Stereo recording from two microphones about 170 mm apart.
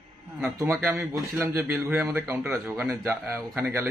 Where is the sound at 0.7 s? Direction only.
15° right (ahead or behind).